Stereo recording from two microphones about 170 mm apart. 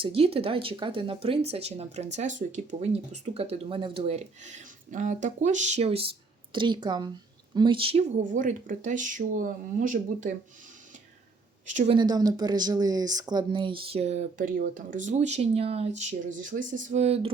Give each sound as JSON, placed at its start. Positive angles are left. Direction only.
{"t": 0.0, "sound": "a woman's voice", "side_deg": -35}
{"t": 8.2, "sound": "speech", "side_deg": -50}
{"t": 11.6, "sound": "a woman's voice", "side_deg": -45}
{"t": 11.9, "sound": "speech", "side_deg": -25}
{"t": 16.0, "sound": "speech", "side_deg": -50}